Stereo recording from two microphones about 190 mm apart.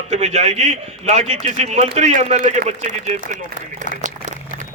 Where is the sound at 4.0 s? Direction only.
40° right (ahead or behind).